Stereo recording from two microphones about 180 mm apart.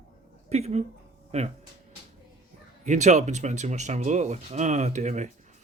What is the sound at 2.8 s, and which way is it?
Speech, 40° right (ahead or behind).